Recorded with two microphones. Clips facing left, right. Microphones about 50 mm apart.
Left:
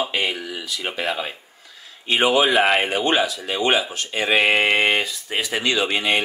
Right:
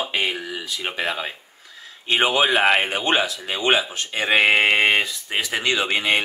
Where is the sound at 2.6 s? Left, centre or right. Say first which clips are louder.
Even; right.